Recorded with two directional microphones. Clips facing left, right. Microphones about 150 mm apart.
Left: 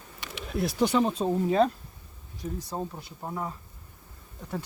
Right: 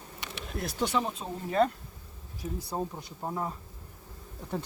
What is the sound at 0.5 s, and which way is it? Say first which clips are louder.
Speech: left 6 dB; 5° left (ahead or behind).